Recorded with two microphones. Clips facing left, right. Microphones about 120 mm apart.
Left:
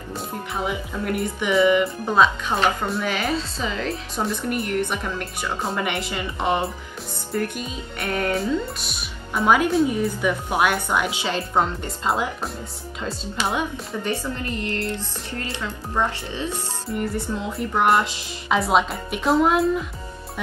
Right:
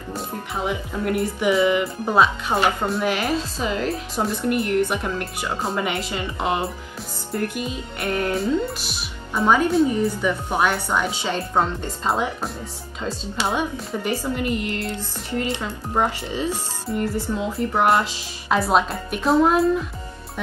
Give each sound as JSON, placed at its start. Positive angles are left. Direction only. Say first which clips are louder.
{"t": 1.0, "sound": "speech", "louder": "right 4 dB", "side_deg": 0}
{"t": 10.5, "sound": "speech", "louder": "even", "side_deg": 10}
{"t": 14.0, "sound": "speech", "louder": "right 4 dB", "side_deg": -15}